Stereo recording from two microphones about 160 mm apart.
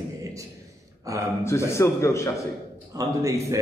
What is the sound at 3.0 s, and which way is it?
Speech, 20° right (ahead or behind).